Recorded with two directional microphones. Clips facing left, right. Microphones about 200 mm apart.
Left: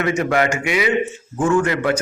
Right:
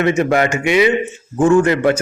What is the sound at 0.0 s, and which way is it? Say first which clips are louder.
A man's voice: right 4 dB; 25° right (ahead or behind).